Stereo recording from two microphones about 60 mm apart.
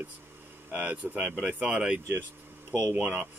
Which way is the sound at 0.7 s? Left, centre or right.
Right.